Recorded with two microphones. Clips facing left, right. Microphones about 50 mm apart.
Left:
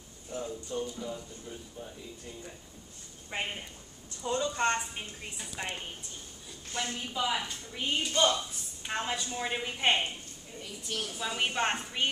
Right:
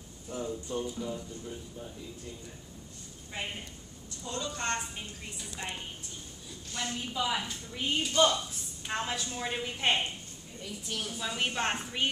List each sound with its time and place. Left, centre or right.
0.4 s speech: centre
0.9 s a woman's voice: centre
3.3 s a woman's voice: left
7.1 s a woman's voice: centre